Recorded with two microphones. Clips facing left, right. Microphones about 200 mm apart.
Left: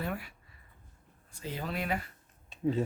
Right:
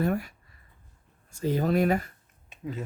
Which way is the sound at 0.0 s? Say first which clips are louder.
Right 9 dB; 45° right (ahead or behind).